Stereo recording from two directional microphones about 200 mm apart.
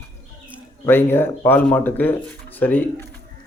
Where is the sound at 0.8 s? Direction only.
10° left (ahead or behind).